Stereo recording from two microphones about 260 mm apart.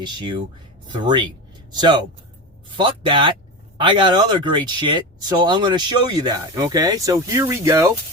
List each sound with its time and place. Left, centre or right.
0.0 s speech: centre